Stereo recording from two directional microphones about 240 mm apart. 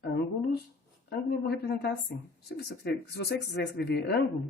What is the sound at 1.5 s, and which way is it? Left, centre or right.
Speech, left.